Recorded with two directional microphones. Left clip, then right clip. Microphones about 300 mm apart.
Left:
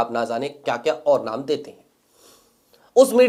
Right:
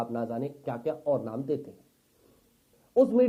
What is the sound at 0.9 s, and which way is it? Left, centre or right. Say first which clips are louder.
Speech: left 10 dB; centre.